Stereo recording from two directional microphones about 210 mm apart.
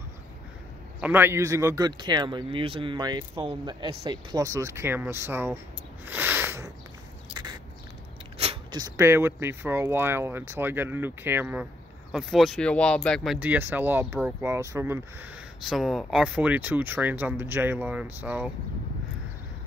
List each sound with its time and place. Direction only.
1.0 s speech: 10° right (ahead or behind)
6.0 s a sound: 10° right (ahead or behind)
8.4 s speech: 25° right (ahead or behind); by 18.5 s 10° right (ahead or behind)